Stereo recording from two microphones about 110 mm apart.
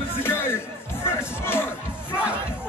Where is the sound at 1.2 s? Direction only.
20° left (ahead or behind).